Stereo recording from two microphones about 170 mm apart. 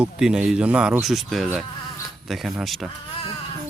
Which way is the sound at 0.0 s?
5° right (ahead or behind).